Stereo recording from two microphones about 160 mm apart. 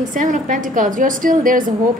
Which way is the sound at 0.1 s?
55° right (ahead or behind).